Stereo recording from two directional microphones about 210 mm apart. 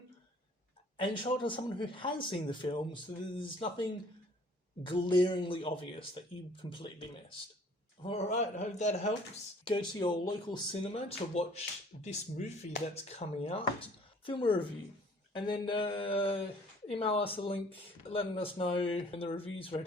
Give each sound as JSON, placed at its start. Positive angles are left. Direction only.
{"t": 0.9, "sound": "speech", "side_deg": 25}
{"t": 4.9, "sound": "speech", "side_deg": 25}